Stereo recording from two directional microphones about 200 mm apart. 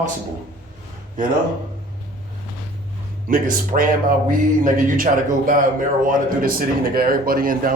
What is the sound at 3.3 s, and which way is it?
A man's voice, 45° right (ahead or behind).